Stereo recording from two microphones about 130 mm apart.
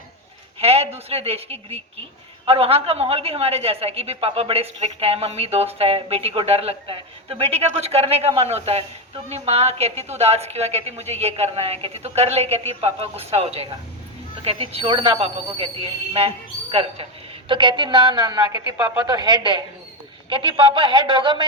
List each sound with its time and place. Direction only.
0.6 s a woman's voice: 50° right (ahead or behind)
17.5 s speech: 40° right (ahead or behind)